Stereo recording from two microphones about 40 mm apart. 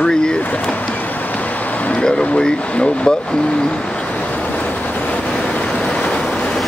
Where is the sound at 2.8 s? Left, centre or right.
Left.